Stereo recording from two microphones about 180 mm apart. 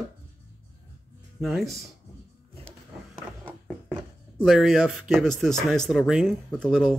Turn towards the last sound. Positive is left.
turn(degrees=0)  # may be behind; listen again after turning